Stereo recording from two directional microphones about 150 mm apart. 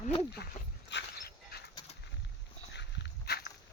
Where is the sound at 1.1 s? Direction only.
90° left.